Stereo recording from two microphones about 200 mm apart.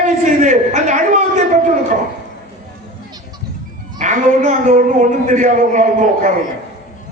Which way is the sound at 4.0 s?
40° right (ahead or behind).